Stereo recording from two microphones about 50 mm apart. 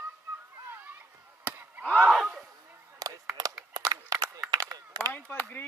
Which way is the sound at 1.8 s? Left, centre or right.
Left.